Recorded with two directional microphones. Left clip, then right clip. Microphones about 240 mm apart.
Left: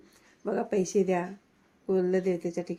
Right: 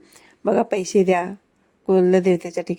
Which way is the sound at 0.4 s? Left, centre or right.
Right.